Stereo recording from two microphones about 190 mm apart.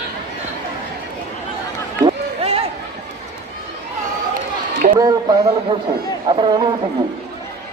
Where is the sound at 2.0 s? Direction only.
30° right (ahead or behind).